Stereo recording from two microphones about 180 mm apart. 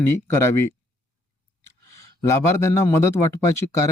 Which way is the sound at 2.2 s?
15° left (ahead or behind).